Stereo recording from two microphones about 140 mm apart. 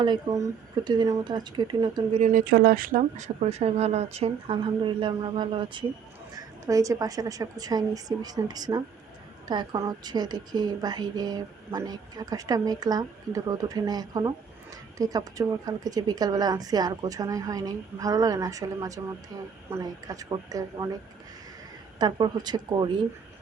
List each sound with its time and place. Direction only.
0.3 s a woman's voice: 20° right (ahead or behind)
2.3 s speech: 90° right; by 5.8 s 35° right (ahead or behind)
6.3 s a woman's voice: 25° right (ahead or behind)
21.9 s speech: 30° right (ahead or behind)